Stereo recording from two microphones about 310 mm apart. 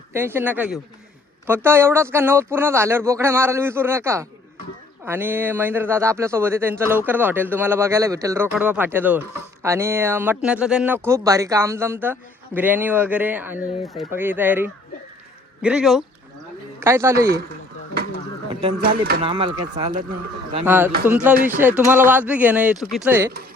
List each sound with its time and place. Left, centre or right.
0.1 s speech: centre
17.2 s speech: right
18.8 s speech: right
19.2 s speech: centre